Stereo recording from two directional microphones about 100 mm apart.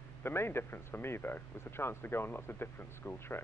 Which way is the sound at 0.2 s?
25° left (ahead or behind).